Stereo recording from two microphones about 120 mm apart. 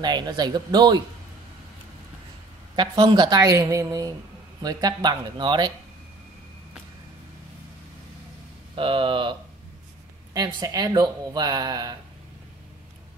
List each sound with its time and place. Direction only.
0.0 s speech: 35° right (ahead or behind)
2.7 s speech: 40° right (ahead or behind)
8.7 s speech: 45° right (ahead or behind)
10.3 s speech: 30° right (ahead or behind)